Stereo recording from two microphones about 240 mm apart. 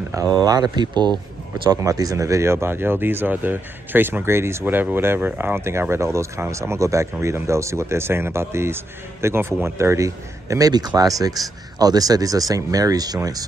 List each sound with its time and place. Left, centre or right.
0.4 s speech: centre